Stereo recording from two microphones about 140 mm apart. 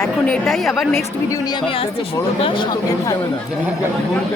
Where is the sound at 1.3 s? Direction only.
30° left (ahead or behind).